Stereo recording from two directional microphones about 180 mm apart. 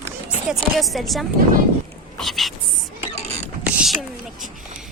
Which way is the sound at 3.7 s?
5° right (ahead or behind).